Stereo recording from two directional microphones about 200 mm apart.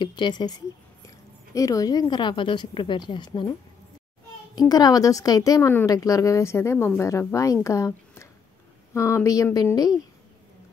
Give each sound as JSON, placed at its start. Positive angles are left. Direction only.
{"t": 0.0, "sound": "a woman's voice", "side_deg": 20}
{"t": 4.6, "sound": "a woman's voice", "side_deg": 20}